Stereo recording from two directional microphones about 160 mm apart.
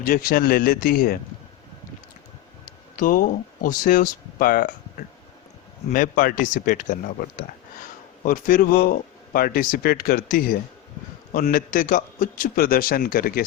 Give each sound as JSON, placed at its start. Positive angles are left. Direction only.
{"t": 0.0, "sound": "speech", "side_deg": 65}
{"t": 2.6, "sound": "speech", "side_deg": 60}
{"t": 5.9, "sound": "a man's voice", "side_deg": 55}